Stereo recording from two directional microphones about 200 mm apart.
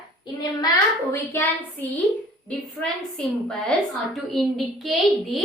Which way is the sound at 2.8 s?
5° left (ahead or behind).